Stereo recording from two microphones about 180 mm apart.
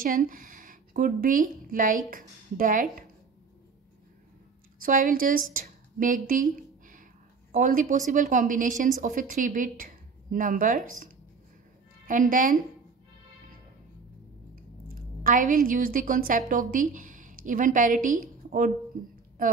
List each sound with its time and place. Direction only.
0.0 s a woman's voice: 50° right (ahead or behind)
4.7 s a woman's voice: 50° right (ahead or behind)
7.5 s a woman's voice: 50° right (ahead or behind)
12.1 s a woman's voice: 45° right (ahead or behind)
14.5 s a woman's voice: 50° right (ahead or behind)